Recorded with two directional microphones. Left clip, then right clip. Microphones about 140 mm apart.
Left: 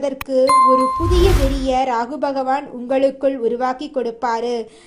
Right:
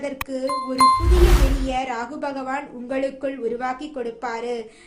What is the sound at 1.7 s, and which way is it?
A woman's voice, 40° left (ahead or behind).